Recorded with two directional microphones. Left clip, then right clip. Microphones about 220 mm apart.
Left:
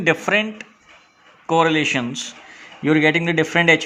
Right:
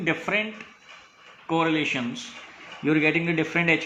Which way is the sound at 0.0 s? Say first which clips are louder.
Left 7 dB; 55° left (ahead or behind).